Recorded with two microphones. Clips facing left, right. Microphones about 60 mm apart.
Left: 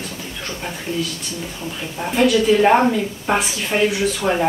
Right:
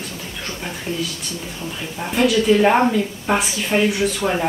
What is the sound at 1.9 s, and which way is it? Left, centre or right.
A woman's voice, centre.